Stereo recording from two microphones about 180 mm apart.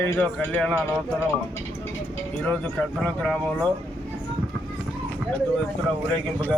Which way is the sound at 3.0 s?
5° left (ahead or behind).